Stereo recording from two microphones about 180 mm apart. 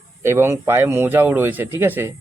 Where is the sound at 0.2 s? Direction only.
15° right (ahead or behind).